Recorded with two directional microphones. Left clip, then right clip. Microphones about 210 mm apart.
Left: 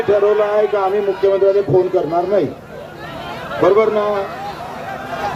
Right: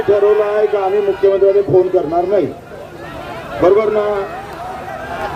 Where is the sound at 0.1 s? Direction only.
25° left (ahead or behind).